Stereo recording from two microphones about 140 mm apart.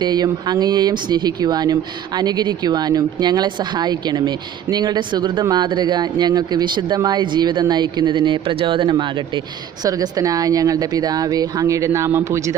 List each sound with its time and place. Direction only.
0.0 s speech: 30° right (ahead or behind)